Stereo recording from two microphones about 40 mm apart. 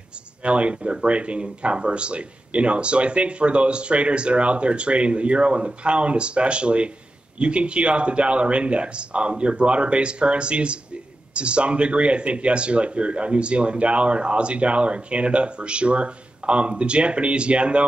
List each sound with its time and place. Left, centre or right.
0.4 s speech: right